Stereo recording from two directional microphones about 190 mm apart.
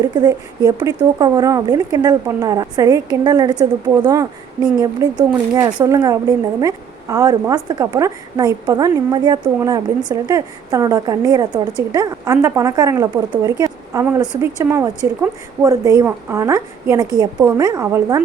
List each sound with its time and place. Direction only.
0.0 s a woman's voice: 20° right (ahead or behind)